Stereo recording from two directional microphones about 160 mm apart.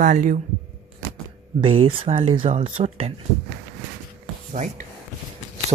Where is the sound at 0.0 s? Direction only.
55° right (ahead or behind).